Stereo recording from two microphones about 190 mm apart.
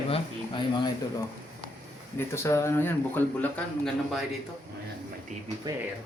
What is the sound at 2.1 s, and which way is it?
A man's voice, 15° left (ahead or behind).